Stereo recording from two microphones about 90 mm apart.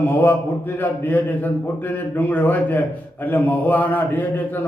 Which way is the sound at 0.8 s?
20° left (ahead or behind).